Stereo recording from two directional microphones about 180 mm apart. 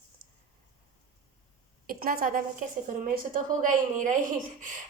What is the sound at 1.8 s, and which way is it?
Speech, 50° right (ahead or behind).